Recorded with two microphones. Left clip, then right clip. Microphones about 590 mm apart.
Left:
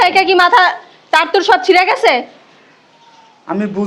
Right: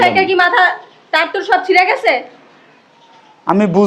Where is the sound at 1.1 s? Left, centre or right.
Left.